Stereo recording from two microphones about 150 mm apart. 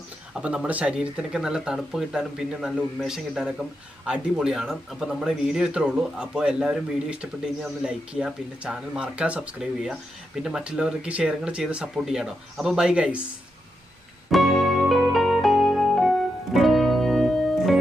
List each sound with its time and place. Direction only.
0.4 s speech: 10° right (ahead or behind)
14.3 s music: centre (ahead or behind)